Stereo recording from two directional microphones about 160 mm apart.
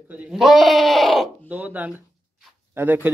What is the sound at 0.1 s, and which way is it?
Bleat, 5° right (ahead or behind).